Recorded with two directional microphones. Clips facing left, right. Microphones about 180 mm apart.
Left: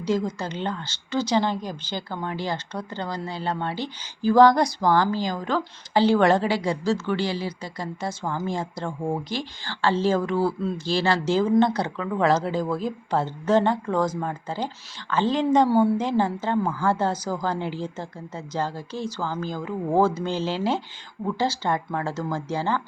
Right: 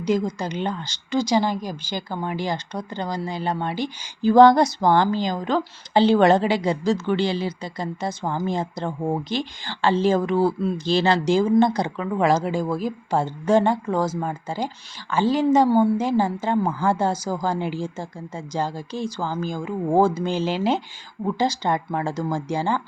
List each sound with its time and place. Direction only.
0.0 s a woman's voice: 15° right (ahead or behind)